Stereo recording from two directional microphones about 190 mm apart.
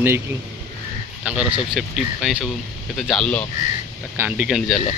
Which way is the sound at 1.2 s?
5° right (ahead or behind).